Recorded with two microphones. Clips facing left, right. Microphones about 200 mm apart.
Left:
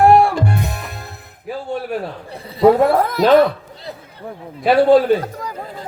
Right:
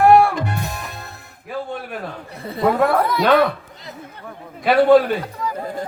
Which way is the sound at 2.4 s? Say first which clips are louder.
Left 3 dB; 55° right (ahead or behind).